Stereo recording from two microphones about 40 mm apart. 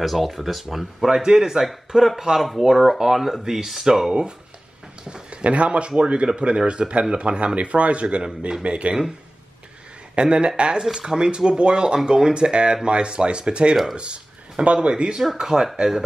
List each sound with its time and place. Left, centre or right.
0.0 s speech: centre
5.1 s speech: right
10.1 s speech: right
15.3 s speech: centre